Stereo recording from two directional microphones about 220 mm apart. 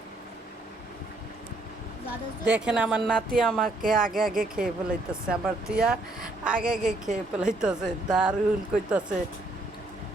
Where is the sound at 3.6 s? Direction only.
40° right (ahead or behind).